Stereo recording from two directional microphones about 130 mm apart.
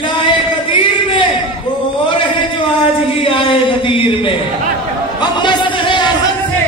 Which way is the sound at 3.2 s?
40° left (ahead or behind).